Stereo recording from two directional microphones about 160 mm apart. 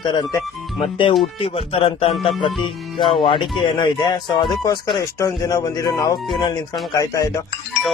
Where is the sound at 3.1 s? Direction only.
30° left (ahead or behind).